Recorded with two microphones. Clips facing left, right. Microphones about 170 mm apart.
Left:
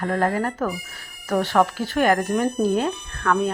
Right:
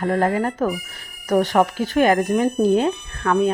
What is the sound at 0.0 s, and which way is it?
Speech, 20° right (ahead or behind).